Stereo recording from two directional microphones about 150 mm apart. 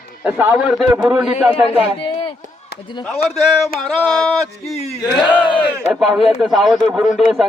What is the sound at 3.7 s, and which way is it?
Speech, 5° left (ahead or behind).